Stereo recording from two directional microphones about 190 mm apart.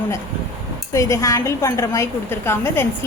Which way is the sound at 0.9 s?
15° left (ahead or behind).